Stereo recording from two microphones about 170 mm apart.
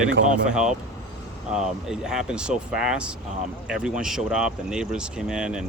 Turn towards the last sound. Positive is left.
turn(degrees=-5)  # may be behind; listen again after turning